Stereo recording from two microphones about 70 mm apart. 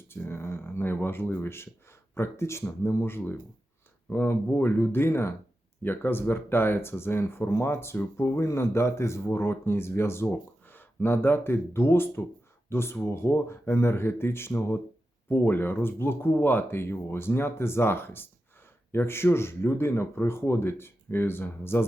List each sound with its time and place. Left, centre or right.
0.1 s speech: left